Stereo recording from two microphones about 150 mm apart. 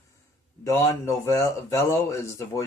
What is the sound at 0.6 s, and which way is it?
Speech, 20° left (ahead or behind).